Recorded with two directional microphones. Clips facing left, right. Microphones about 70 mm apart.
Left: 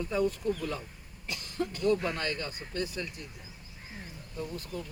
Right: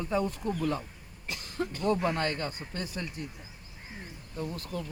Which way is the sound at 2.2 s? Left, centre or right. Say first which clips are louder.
Right 3 dB; right.